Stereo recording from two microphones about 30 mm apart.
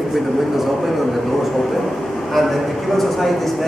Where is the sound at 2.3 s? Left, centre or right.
Centre.